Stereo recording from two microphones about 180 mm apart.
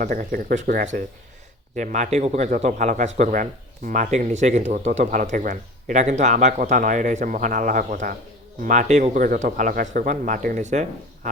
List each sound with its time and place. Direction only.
0.0 s a man's voice: 50° right (ahead or behind)